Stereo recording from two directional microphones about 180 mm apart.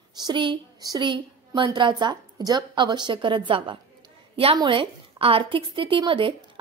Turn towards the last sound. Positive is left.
turn(degrees=-30)  # may be behind; listen again after turning